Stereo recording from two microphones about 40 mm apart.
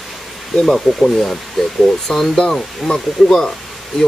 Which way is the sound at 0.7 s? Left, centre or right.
Centre.